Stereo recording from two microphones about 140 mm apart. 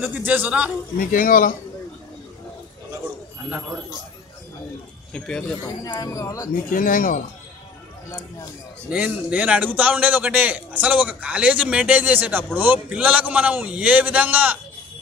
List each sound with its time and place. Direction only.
0.0 s a man's voice: 10° right (ahead or behind)
0.9 s speech: 85° left
3.4 s a man's voice: 10° right (ahead or behind)
5.1 s speech: 5° left (ahead or behind)
5.9 s speech: 25° left (ahead or behind)
6.5 s speech: 75° left (ahead or behind)
8.8 s a man's voice: 10° right (ahead or behind)